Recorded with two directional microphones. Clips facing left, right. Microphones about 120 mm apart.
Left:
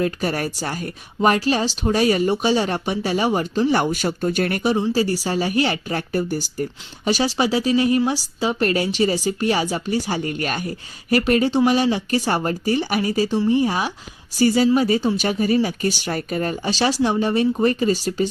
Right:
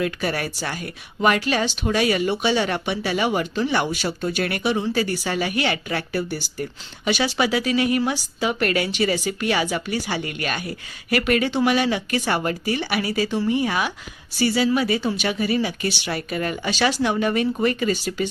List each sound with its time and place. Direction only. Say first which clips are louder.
0.0 s speech: left 2 dB; 40° left (ahead or behind)